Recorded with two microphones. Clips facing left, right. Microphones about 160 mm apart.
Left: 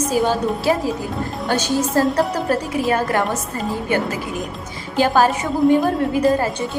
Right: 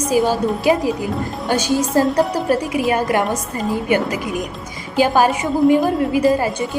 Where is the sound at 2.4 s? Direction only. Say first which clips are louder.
Right 2 dB; 10° right (ahead or behind).